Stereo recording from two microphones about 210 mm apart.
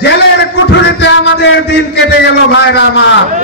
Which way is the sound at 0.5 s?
55° left (ahead or behind).